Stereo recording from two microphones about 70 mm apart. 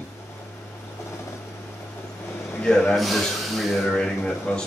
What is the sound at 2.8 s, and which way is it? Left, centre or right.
Speech, centre.